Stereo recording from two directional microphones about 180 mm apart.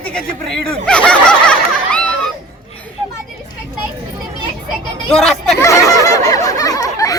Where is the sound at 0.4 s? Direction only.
5° left (ahead or behind).